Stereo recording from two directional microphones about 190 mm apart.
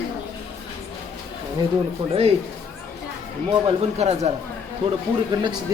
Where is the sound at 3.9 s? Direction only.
35° right (ahead or behind).